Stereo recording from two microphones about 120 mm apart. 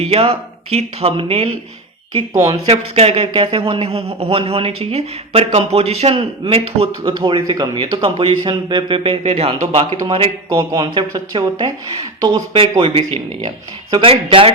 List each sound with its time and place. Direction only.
0.0 s speech: 55° right (ahead or behind)
2.6 s speech: 55° right (ahead or behind); by 7.8 s 35° right (ahead or behind)
8.2 s speech: 45° right (ahead or behind)
10.9 s speech: 40° right (ahead or behind)
12.8 s speech: 50° right (ahead or behind)